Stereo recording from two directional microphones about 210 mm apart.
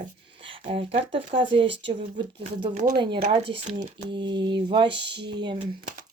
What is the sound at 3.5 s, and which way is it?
Speech, 30° right (ahead or behind).